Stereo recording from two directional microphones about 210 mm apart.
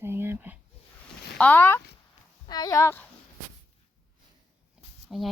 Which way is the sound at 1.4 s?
10° left (ahead or behind).